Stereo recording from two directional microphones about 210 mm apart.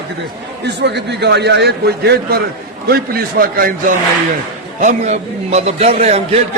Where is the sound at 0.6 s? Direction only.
55° right (ahead or behind); by 6.4 s 30° right (ahead or behind).